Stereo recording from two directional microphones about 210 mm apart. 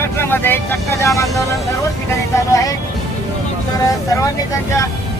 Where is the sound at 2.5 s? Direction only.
15° left (ahead or behind).